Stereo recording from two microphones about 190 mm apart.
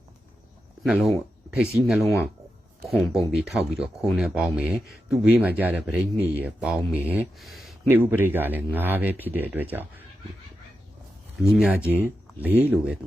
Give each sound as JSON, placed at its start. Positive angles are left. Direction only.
{"t": 0.9, "sound": "speech", "side_deg": -5}
{"t": 7.9, "sound": "speech", "side_deg": -10}
{"t": 11.3, "sound": "speech", "side_deg": -5}